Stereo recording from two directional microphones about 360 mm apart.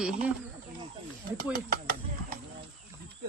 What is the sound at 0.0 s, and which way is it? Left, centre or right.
Speech, centre.